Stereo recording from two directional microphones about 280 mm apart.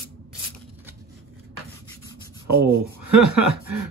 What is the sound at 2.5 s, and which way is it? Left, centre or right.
Speech, right.